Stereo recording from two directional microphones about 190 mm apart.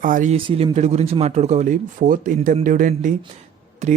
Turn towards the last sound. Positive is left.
turn(degrees=-35)  # may be behind; listen again after turning